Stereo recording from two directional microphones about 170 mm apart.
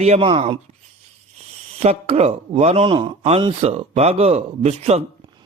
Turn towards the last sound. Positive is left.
turn(degrees=-40)  # may be behind; listen again after turning